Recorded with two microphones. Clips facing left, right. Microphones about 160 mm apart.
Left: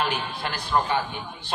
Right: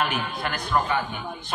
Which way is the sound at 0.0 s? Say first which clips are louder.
Right 1 dB; 30° left (ahead or behind).